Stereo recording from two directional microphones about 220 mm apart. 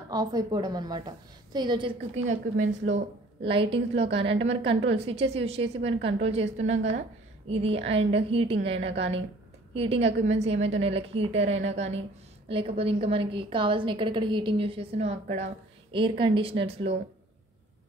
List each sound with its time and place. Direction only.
0.1 s a woman's voice: 15° right (ahead or behind); by 2.9 s 35° right (ahead or behind)
3.4 s a woman's voice: 25° right (ahead or behind)